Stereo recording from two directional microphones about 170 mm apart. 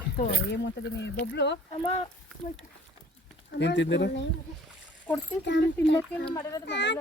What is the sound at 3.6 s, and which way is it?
Speech, 90° left.